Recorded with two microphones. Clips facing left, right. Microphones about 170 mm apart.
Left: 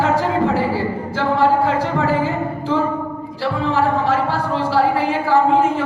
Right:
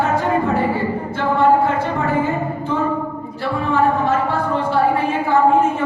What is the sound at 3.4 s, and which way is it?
Speech, 90° left.